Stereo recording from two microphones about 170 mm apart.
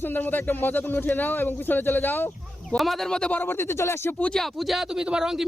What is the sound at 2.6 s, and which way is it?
Speech, centre (ahead or behind).